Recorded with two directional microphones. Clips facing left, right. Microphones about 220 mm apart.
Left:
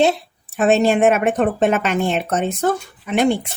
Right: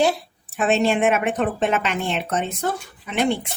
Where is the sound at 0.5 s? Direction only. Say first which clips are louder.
Left 4 dB; 45° left (ahead or behind).